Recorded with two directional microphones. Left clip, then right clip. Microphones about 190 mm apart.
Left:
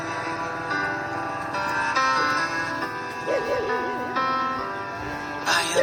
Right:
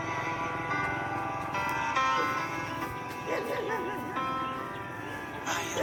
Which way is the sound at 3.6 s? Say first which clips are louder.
Left 7 dB; 25° left (ahead or behind).